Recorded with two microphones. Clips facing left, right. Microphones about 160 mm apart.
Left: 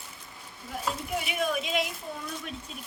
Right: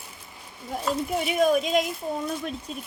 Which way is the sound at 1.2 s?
40° right (ahead or behind).